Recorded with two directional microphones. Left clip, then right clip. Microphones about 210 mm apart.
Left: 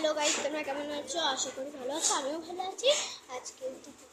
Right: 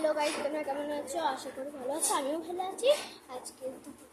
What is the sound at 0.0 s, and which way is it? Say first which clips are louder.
A woman's voice: even; 5° right (ahead or behind).